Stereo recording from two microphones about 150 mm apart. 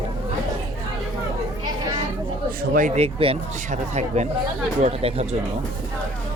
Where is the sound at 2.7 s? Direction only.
55° right (ahead or behind).